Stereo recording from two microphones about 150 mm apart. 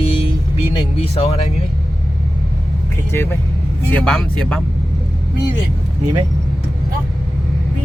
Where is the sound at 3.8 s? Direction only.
10° left (ahead or behind).